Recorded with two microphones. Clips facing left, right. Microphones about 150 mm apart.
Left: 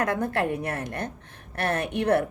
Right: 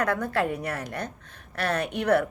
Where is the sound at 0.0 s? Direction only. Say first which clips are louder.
Even; 25° left (ahead or behind).